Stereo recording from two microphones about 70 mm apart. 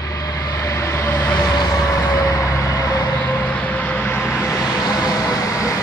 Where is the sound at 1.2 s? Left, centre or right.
Centre.